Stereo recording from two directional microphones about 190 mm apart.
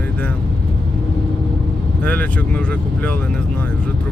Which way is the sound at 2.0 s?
5° left (ahead or behind).